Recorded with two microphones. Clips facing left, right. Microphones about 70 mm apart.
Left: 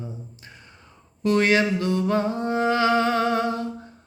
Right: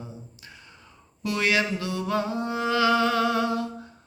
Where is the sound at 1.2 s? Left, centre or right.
Left.